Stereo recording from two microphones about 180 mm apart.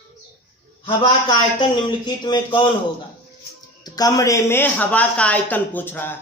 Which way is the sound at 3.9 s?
20° left (ahead or behind).